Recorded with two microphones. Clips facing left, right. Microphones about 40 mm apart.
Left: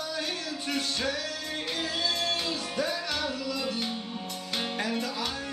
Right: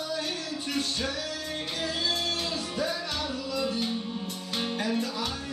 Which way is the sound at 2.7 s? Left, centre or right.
Left.